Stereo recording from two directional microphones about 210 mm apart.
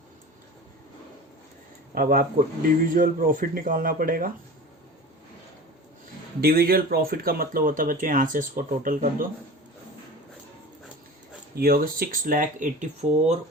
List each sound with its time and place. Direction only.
2.0 s speech: 45° right (ahead or behind)
6.4 s speech: 45° right (ahead or behind)
11.5 s speech: 45° right (ahead or behind)